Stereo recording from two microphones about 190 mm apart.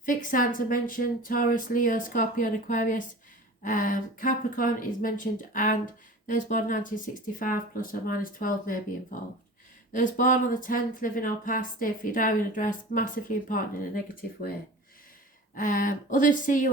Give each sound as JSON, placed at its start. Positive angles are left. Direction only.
{"t": 0.0, "sound": "speech", "side_deg": 45}
{"t": 15.5, "sound": "speech", "side_deg": 45}